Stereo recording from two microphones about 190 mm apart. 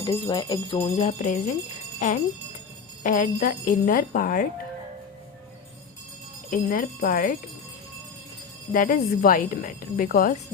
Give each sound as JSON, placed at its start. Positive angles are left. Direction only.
{"t": 0.0, "sound": "jingle bell", "side_deg": 20}
{"t": 3.0, "sound": "a woman's voice", "side_deg": 45}
{"t": 6.5, "sound": "a woman's voice", "side_deg": 45}
{"t": 8.7, "sound": "a woman's voice", "side_deg": 45}